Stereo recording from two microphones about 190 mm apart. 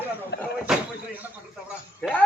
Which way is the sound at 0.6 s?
10° right (ahead or behind).